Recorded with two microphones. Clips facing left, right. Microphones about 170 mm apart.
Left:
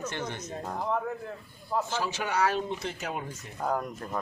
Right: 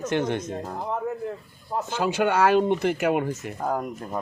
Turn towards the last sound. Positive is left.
turn(degrees=-5)  # may be behind; listen again after turning